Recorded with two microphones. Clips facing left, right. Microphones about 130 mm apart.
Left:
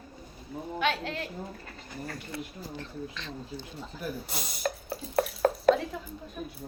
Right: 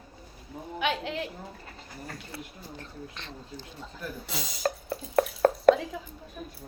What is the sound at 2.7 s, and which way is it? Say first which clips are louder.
Speech: left 4 dB; 55° right (ahead or behind).